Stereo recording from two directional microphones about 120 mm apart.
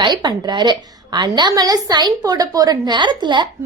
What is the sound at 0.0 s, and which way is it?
A woman's voice, 40° right (ahead or behind).